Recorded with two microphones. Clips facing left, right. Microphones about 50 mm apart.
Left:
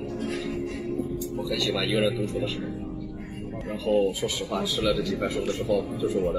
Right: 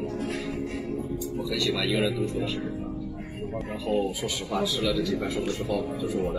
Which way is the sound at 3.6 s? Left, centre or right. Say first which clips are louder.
Left 4 dB; centre.